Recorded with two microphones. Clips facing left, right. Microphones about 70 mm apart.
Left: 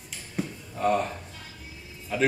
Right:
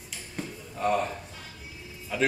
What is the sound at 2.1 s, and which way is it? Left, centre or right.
Speech, centre.